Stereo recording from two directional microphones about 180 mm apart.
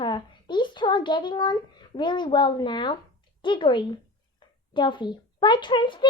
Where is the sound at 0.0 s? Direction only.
25° left (ahead or behind).